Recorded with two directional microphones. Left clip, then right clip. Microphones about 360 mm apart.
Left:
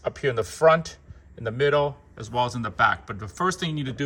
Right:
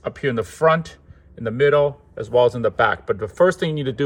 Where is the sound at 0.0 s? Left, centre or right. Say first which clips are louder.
Right 2 dB; centre.